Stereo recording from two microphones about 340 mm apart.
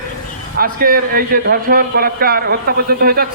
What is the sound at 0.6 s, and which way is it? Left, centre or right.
A man's voice, right.